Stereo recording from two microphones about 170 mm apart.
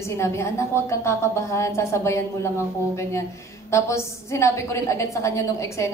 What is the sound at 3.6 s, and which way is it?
Speech, 15° left (ahead or behind).